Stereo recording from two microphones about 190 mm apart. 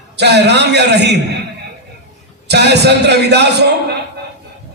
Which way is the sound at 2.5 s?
60° right (ahead or behind).